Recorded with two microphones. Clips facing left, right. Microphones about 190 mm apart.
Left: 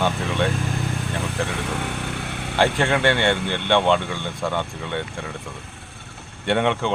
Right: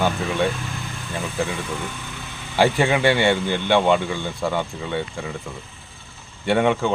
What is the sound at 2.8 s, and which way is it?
Speech, 10° right (ahead or behind).